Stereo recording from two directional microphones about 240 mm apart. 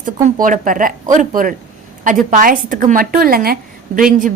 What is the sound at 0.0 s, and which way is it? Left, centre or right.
A woman's voice, right.